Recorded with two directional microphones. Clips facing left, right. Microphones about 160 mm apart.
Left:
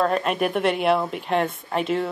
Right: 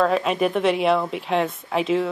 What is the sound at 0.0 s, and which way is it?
A woman's voice, centre (ahead or behind).